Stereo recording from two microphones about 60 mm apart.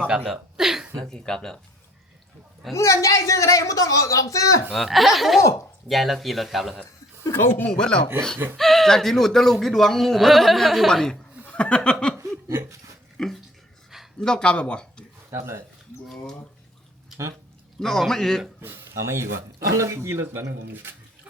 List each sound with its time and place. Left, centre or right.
0.3 s a sound: centre
1.1 s speech: centre
2.7 s speech: left
4.7 s speech: centre
5.4 s speech: left
5.9 s speech: centre
7.3 s speech: left
7.7 s speech: centre
11.4 s chuckle: centre
12.2 s laughter: right
13.1 s speech: centre
15.3 s speech: right
17.7 s speech: centre
18.6 s speech: right